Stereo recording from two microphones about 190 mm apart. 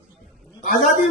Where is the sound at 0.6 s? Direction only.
45° left (ahead or behind).